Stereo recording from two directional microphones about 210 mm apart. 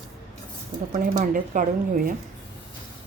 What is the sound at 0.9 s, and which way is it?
A woman's voice, 35° right (ahead or behind).